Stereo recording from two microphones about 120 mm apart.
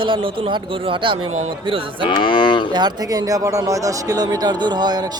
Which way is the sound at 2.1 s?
40° left (ahead or behind).